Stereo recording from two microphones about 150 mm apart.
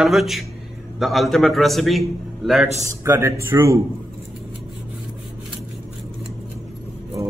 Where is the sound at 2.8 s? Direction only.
20° right (ahead or behind).